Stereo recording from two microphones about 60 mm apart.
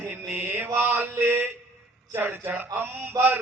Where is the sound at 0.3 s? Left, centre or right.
Right.